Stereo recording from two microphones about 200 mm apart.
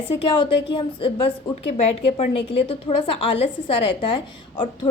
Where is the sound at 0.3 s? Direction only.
25° left (ahead or behind).